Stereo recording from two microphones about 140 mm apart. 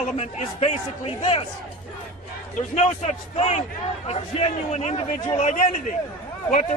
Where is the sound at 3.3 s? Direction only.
50° left (ahead or behind).